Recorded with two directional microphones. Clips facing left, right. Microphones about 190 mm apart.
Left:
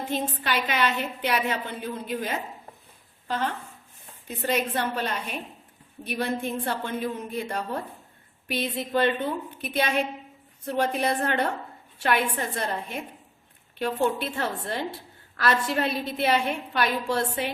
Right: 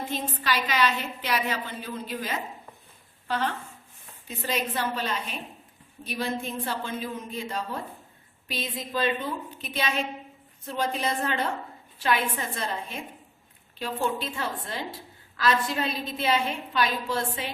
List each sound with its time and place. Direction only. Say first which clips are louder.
0.1 s a woman's voice: left 3 dB; 55° left (ahead or behind)
4.4 s a woman's voice: left 3 dB; 60° left (ahead or behind)